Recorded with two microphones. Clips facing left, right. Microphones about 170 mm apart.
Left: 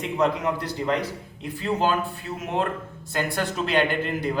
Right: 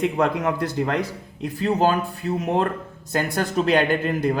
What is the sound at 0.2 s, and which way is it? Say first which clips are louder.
A man's voice: right 2 dB; 50° right (ahead or behind).